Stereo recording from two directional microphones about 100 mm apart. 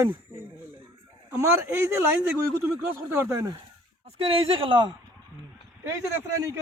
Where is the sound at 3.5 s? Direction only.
65° right (ahead or behind).